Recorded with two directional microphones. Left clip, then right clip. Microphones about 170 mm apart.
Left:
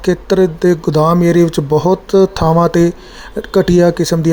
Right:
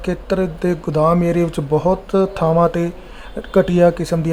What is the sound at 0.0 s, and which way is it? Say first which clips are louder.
Speech: left 8 dB; 20° left (ahead or behind).